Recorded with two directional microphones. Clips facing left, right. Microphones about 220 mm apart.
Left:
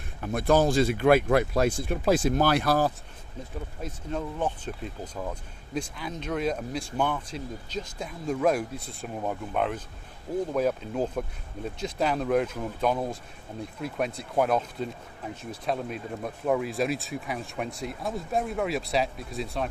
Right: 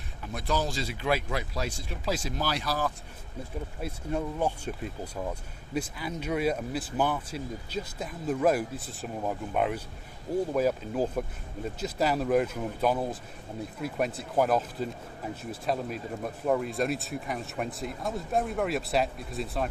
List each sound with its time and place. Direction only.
0.2 s speech: 50° left (ahead or behind)
3.8 s speech: 10° right (ahead or behind)